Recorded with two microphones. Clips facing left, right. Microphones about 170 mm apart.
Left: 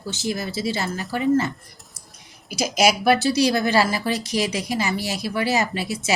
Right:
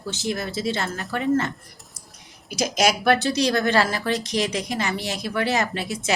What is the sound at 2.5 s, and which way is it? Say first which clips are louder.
A woman's voice: left 2 dB; 5° left (ahead or behind).